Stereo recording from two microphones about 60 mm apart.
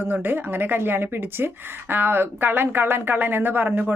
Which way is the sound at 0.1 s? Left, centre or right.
Right.